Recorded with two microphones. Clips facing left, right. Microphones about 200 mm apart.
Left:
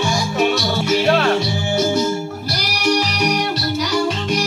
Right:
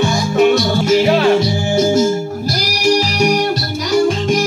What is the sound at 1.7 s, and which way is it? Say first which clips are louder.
Music: right 5 dB; 45° right (ahead or behind).